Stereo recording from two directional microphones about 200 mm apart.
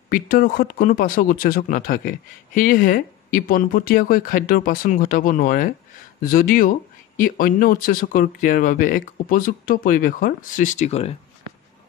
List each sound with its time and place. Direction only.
0.1 s speech: 45° left (ahead or behind)